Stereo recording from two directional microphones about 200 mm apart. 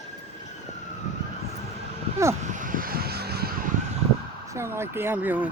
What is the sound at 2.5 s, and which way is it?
Vehicle, 45° right (ahead or behind).